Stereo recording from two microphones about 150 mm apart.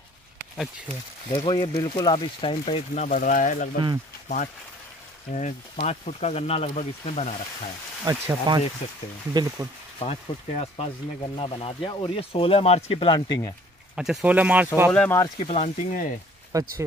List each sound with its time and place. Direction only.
1.3 s speech: 30° left (ahead or behind)
2.9 s speech: 55° left (ahead or behind)
5.3 s speech: 55° left (ahead or behind)
8.0 s speech: 20° right (ahead or behind)
10.0 s speech: 45° left (ahead or behind)
13.9 s speech: 5° right (ahead or behind)
14.9 s speech: 10° left (ahead or behind)
15.3 s speech: 40° left (ahead or behind)
15.9 s speech: 60° left (ahead or behind)
16.5 s speech: 20° right (ahead or behind)